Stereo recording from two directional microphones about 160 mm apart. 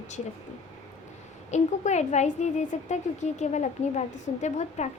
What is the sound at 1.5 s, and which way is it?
A woman's voice, 45° left (ahead or behind).